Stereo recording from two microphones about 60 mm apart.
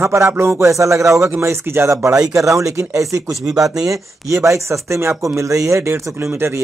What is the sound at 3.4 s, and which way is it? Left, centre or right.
Speech, centre.